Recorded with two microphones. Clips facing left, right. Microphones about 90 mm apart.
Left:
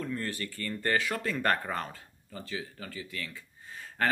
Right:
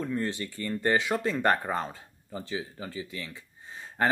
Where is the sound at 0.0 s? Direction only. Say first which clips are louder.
Right 4 dB; 20° right (ahead or behind).